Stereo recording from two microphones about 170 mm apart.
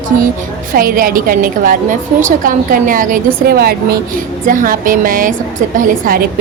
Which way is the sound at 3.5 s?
65° right (ahead or behind).